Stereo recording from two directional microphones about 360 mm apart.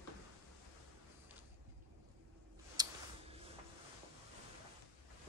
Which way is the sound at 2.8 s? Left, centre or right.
Centre.